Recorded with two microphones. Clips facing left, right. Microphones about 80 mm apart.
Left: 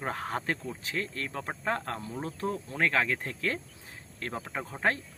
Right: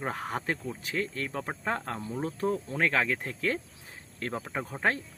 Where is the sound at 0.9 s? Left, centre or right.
Right.